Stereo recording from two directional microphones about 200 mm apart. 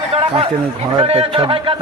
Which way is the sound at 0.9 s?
30° right (ahead or behind).